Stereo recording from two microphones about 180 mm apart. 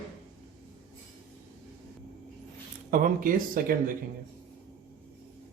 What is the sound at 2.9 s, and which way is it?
Speech, 50° right (ahead or behind).